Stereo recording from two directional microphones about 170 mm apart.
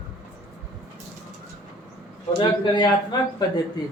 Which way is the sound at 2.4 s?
25° left (ahead or behind).